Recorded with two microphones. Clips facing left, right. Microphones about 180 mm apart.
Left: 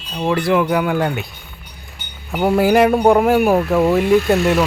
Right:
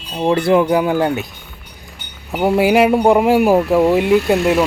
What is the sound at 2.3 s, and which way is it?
Speech, 15° right (ahead or behind).